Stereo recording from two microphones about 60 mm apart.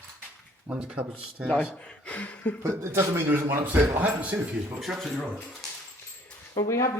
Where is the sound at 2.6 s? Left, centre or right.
Right.